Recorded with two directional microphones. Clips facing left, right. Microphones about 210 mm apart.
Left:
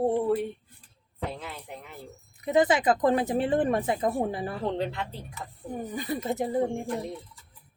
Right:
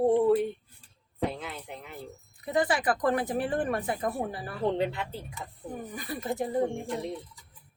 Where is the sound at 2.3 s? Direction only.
20° left (ahead or behind).